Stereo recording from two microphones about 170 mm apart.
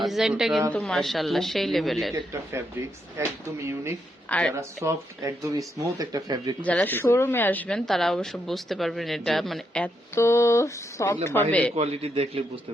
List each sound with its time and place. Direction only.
0.0 s a woman's voice: centre (ahead or behind)
2.1 s speech: 20° right (ahead or behind)
4.3 s speech: 5° left (ahead or behind)
4.5 s speech: 15° right (ahead or behind)
6.6 s a woman's voice: 10° left (ahead or behind)
10.2 s speech: 15° left (ahead or behind)
11.8 s a man's voice: 35° right (ahead or behind)